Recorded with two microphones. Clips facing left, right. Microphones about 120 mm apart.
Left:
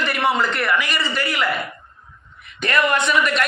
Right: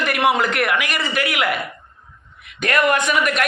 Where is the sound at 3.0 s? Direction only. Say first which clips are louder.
Even; 10° right (ahead or behind).